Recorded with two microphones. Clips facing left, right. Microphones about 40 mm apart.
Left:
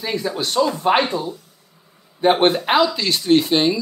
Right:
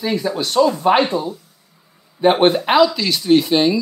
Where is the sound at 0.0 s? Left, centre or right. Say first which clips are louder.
Right 3 dB; centre.